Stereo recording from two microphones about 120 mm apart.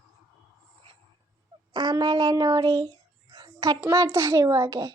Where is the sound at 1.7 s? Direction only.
35° right (ahead or behind).